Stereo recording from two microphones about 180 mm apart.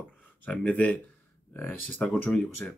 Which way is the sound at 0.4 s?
5° left (ahead or behind).